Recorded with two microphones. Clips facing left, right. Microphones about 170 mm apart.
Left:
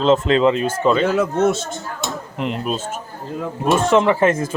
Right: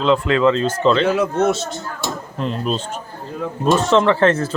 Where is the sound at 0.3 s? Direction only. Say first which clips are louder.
Even; 20° left (ahead or behind).